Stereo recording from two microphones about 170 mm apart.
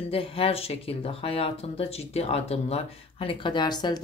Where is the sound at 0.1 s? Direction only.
35° left (ahead or behind).